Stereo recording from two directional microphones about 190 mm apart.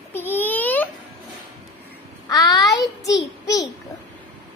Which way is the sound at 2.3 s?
20° left (ahead or behind).